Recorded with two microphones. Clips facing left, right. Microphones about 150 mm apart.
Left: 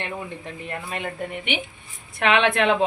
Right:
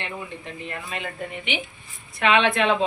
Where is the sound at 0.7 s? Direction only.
45° left (ahead or behind).